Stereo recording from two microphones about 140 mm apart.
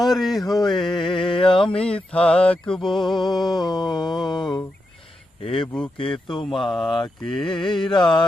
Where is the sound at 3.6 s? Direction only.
30° left (ahead or behind).